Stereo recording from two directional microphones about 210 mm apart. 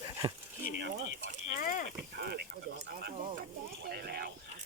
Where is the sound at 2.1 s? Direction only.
50° right (ahead or behind).